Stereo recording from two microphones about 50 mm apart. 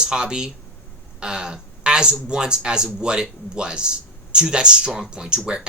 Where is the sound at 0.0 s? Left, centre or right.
Centre.